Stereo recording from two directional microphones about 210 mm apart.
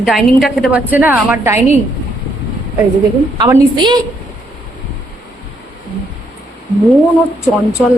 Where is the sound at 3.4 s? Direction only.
20° right (ahead or behind).